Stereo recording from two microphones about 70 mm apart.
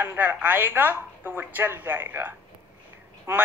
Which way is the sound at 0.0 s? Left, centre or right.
Right.